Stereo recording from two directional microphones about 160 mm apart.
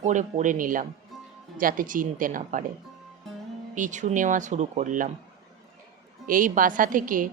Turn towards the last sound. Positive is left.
turn(degrees=-60)  # may be behind; listen again after turning